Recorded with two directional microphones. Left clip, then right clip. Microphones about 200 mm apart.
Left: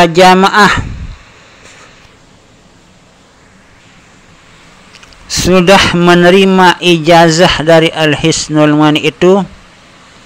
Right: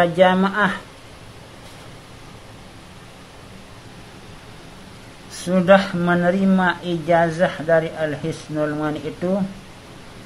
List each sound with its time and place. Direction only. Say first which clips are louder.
0.0 s a man's voice: left 11 dB; 30° left (ahead or behind)
5.5 s a man's voice: left 9 dB; 30° left (ahead or behind)